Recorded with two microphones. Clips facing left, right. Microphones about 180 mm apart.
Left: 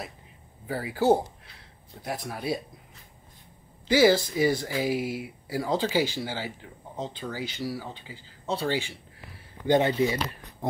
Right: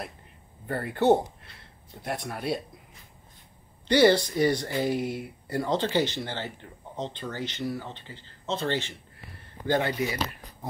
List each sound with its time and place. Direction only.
0.7 s speech: 5° left (ahead or behind)
3.8 s speech: 5° left (ahead or behind)
9.7 s speech: 20° left (ahead or behind)